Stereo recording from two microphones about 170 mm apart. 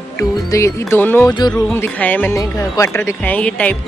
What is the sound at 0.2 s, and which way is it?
Speech, 20° left (ahead or behind).